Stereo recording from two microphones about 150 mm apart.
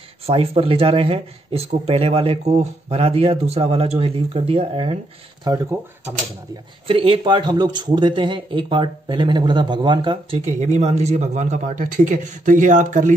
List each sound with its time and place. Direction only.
0.3 s speech: 40° right (ahead or behind)
5.4 s speech: 25° right (ahead or behind)
6.9 s speech: 40° right (ahead or behind)
10.4 s speech: 45° right (ahead or behind)